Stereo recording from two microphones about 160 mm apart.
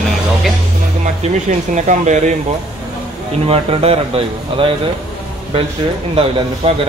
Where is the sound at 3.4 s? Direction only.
40° right (ahead or behind).